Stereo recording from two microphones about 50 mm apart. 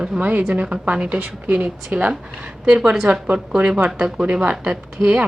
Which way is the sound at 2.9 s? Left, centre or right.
Centre.